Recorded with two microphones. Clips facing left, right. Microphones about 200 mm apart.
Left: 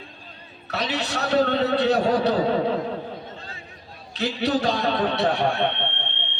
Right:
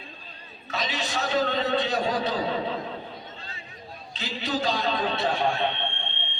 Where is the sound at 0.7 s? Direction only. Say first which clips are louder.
Left 4 dB; 65° left (ahead or behind).